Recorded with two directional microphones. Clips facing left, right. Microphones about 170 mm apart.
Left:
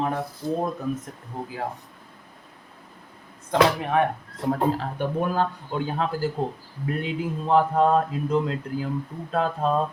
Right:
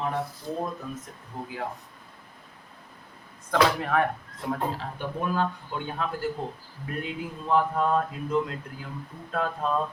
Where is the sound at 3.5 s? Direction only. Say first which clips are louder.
Left 3 dB; 20° left (ahead or behind).